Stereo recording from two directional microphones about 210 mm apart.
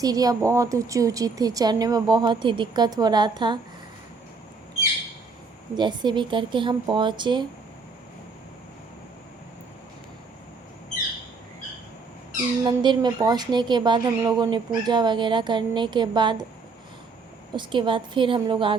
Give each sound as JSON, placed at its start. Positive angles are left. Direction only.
{"t": 0.0, "sound": "a woman's voice", "side_deg": -15}
{"t": 5.7, "sound": "a woman's voice", "side_deg": -20}
{"t": 12.6, "sound": "a woman's voice", "side_deg": -20}
{"t": 17.5, "sound": "a woman's voice", "side_deg": -20}